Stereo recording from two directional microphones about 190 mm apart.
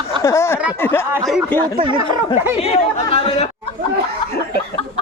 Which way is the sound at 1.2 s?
Centre (ahead or behind).